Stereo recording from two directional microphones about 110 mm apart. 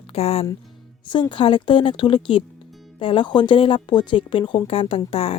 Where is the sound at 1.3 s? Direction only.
50° left (ahead or behind).